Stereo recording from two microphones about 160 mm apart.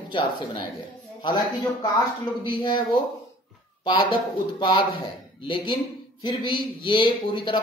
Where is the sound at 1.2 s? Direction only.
25° left (ahead or behind).